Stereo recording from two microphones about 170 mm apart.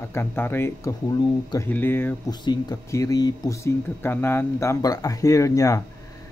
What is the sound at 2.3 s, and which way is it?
Speech, 25° left (ahead or behind).